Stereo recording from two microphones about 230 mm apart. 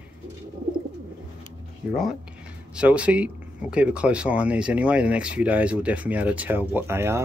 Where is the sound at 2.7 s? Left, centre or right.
Centre.